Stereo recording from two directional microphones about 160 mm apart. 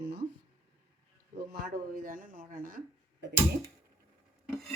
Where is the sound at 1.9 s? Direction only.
60° right (ahead or behind).